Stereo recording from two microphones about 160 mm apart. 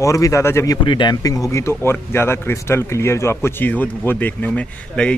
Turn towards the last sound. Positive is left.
turn(degrees=5)  # may be behind; listen again after turning